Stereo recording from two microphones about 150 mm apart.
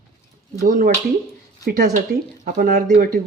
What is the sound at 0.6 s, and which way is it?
Speech, 70° right (ahead or behind).